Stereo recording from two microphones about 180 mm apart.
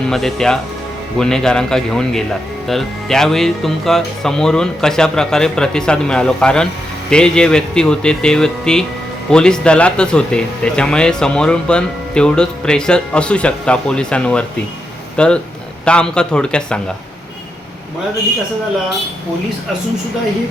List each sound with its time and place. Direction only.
0.1 s speech: 5° left (ahead or behind)